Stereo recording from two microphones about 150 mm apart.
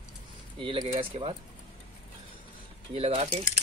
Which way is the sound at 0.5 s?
35° right (ahead or behind).